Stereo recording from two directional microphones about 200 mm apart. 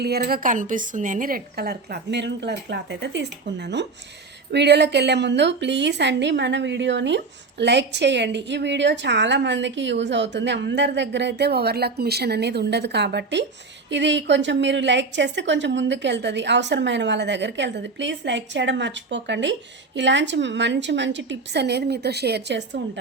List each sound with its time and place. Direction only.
0.0 s a woman's voice: 55° right (ahead or behind)